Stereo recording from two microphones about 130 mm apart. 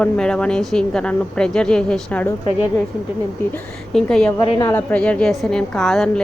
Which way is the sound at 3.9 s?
5° left (ahead or behind).